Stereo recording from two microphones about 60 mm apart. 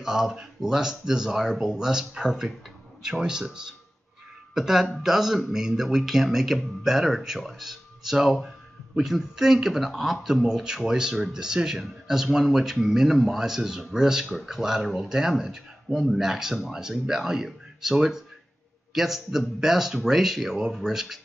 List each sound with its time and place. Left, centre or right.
0.0 s speech: centre